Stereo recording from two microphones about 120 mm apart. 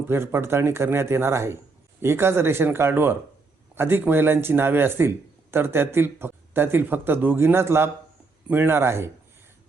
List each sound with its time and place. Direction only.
0.0 s speech: 20° right (ahead or behind)